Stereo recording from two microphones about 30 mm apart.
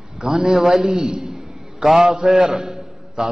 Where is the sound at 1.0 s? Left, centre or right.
Right.